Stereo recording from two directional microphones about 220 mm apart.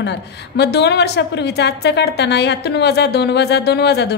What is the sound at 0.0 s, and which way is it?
A woman's voice, 50° left (ahead or behind).